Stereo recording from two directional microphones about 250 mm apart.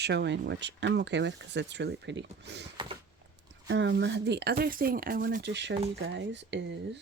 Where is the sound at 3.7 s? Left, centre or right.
Right.